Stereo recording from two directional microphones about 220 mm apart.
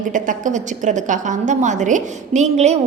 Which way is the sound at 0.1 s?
35° right (ahead or behind).